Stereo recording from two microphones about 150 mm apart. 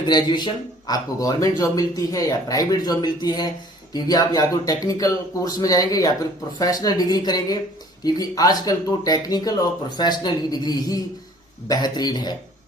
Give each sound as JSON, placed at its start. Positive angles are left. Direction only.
{"t": 0.1, "sound": "speech", "side_deg": 30}